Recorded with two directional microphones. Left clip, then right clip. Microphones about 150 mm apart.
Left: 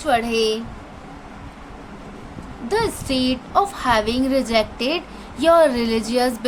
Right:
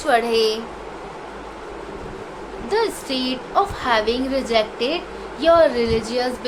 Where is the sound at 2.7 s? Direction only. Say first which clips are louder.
Even; 45° left (ahead or behind).